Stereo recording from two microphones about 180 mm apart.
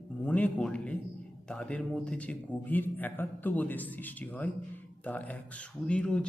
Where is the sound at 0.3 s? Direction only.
10° left (ahead or behind).